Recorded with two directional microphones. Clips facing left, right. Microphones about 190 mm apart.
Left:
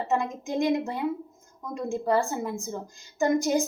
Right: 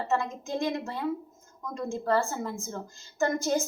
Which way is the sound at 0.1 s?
15° left (ahead or behind).